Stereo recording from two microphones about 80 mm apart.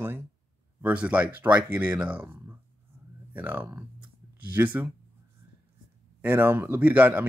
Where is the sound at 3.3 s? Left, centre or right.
Right.